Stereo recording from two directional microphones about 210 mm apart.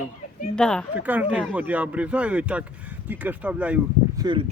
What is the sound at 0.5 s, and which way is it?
Speech, 5° left (ahead or behind).